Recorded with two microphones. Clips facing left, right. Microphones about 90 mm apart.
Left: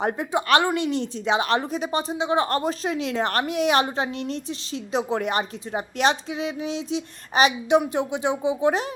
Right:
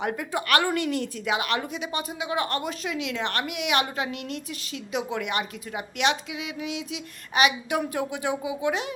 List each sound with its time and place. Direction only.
0.0 s a woman's voice: 30° left (ahead or behind)
7.8 s speech: 20° left (ahead or behind)